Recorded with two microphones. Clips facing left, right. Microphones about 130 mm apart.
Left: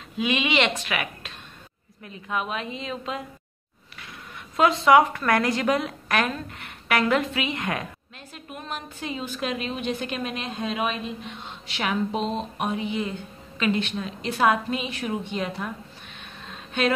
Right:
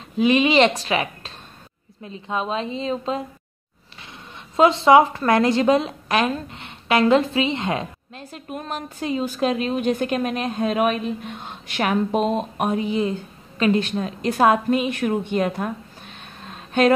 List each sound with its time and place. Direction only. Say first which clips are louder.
0.2 s a woman's voice: right 8 dB; 40° right (ahead or behind)
4.6 s a woman's voice: right 4 dB; 25° right (ahead or behind)
8.2 s a woman's voice: right 7 dB; 40° right (ahead or behind)
16.4 s a sound: right 7 dB; 45° right (ahead or behind)